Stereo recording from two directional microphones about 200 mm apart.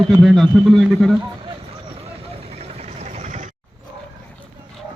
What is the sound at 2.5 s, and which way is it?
Vehicle, 30° right (ahead or behind).